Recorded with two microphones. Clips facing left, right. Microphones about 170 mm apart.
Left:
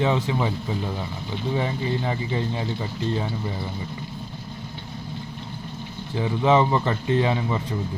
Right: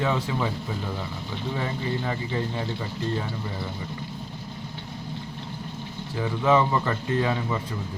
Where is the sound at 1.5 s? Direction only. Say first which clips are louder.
Left 3 dB; 20° left (ahead or behind).